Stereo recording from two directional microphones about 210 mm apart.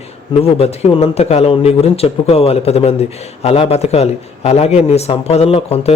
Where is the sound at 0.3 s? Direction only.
30° left (ahead or behind).